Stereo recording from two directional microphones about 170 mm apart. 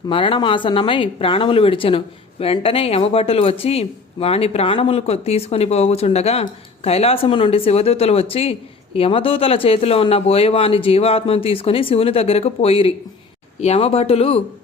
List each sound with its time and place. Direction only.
0.1 s speech: 30° left (ahead or behind)